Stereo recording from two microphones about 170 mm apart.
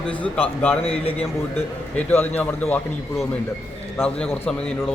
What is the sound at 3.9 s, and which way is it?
A man's voice, 10° left (ahead or behind).